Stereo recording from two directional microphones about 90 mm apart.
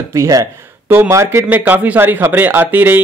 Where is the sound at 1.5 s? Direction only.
20° right (ahead or behind).